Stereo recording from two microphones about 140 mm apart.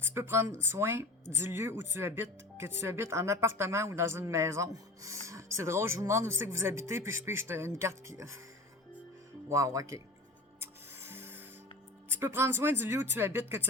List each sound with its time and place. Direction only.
0.1 s a woman's voice: 15° right (ahead or behind)
9.5 s a woman's voice: 25° right (ahead or behind)
10.6 s music: 15° right (ahead or behind)
12.0 s speech: 15° right (ahead or behind)